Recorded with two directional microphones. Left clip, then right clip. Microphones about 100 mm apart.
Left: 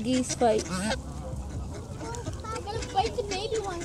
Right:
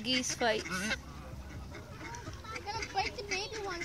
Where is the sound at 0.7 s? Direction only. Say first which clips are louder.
Left 4 dB; 25° left (ahead or behind).